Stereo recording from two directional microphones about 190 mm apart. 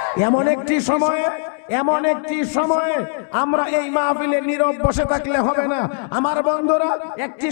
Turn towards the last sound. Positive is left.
turn(degrees=20)  # may be behind; listen again after turning